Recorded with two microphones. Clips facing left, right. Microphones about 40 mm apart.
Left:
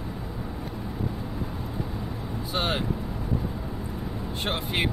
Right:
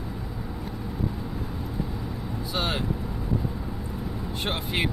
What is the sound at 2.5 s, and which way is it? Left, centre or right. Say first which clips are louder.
Vehicle: left 1 dB; left.